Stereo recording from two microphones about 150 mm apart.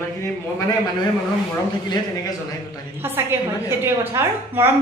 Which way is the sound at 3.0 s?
15° right (ahead or behind).